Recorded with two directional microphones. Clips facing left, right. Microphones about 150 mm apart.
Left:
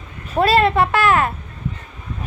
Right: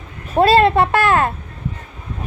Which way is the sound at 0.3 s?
25° right (ahead or behind).